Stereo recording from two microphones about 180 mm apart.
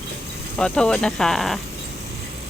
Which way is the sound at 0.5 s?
5° left (ahead or behind).